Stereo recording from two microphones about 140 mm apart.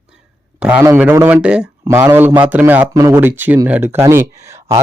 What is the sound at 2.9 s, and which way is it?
Speech, 25° right (ahead or behind).